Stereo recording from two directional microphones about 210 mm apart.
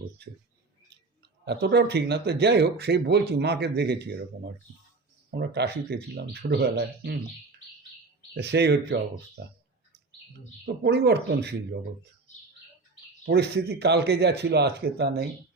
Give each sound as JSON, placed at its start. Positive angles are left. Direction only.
{"t": 1.5, "sound": "speech", "side_deg": -55}
{"t": 5.3, "sound": "speech", "side_deg": -50}
{"t": 8.4, "sound": "speech", "side_deg": -50}
{"t": 10.8, "sound": "speech", "side_deg": -50}
{"t": 13.2, "sound": "speech", "side_deg": -50}